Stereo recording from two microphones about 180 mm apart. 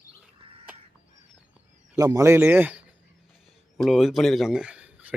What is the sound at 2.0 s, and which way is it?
A man's voice, 20° right (ahead or behind).